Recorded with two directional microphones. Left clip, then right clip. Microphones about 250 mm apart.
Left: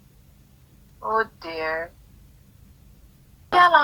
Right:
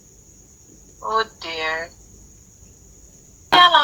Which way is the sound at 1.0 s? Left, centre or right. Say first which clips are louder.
Right 2 dB; centre.